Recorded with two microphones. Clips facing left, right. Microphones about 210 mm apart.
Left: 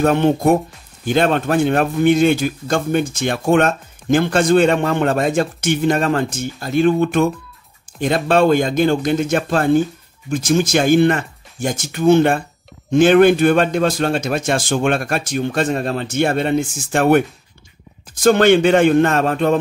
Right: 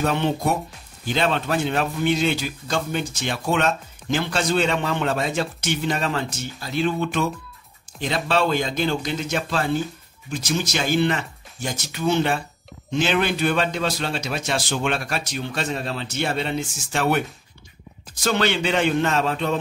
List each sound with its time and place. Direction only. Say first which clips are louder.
0.0 s a man's voice: left 8 dB; 50° left (ahead or behind)